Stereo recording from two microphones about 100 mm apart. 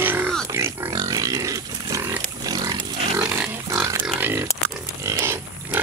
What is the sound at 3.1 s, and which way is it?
Pig, 15° right (ahead or behind).